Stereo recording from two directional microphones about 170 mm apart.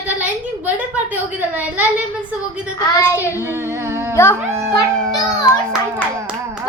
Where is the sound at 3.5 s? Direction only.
15° right (ahead or behind).